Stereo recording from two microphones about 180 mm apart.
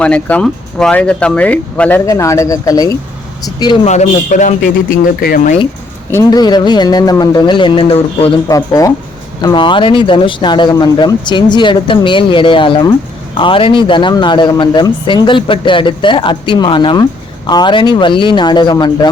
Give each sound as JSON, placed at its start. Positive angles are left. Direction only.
{"t": 0.0, "sound": "a man's voice", "side_deg": 5}
{"t": 3.8, "sound": "a man's voice", "side_deg": 40}
{"t": 6.1, "sound": "a man's voice", "side_deg": 20}
{"t": 8.4, "sound": "a man's voice", "side_deg": 20}